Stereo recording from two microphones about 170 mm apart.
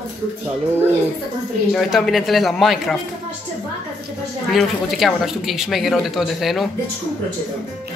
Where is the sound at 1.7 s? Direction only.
Centre (ahead or behind).